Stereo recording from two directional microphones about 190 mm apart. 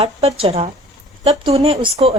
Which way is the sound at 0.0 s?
35° right (ahead or behind).